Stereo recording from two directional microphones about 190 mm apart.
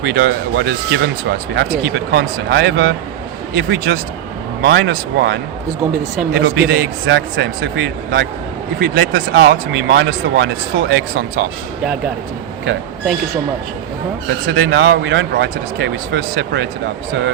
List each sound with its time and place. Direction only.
0.0 s speech: 60° right (ahead or behind)
14.4 s speech: 85° right; by 16.6 s 70° right (ahead or behind)